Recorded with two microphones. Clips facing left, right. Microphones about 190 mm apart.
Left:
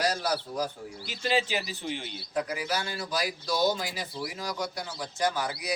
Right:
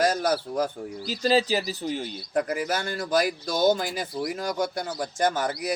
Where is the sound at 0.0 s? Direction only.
50° right (ahead or behind).